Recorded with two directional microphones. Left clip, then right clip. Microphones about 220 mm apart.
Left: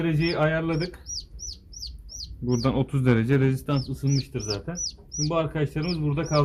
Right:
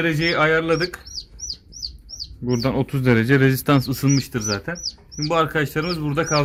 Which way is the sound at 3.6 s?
45° right (ahead or behind).